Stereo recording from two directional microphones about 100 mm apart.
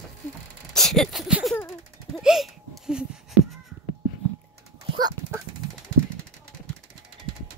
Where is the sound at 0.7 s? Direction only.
5° left (ahead or behind).